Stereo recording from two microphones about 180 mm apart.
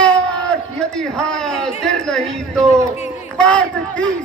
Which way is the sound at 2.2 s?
40° right (ahead or behind).